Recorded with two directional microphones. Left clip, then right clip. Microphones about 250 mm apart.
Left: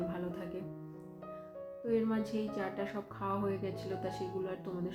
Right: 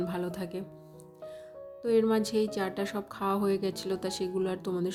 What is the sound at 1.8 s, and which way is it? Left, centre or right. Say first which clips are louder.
Speech: right 8 dB; right.